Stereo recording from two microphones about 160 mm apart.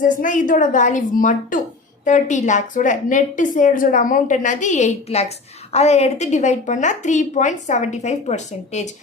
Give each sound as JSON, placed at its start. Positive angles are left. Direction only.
{"t": 0.0, "sound": "a woman's voice", "side_deg": 55}